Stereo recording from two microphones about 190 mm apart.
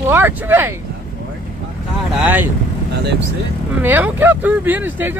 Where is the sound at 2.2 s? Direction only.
10° right (ahead or behind).